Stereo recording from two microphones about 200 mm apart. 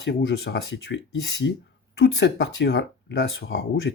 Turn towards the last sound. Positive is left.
turn(degrees=55)  # may be behind; listen again after turning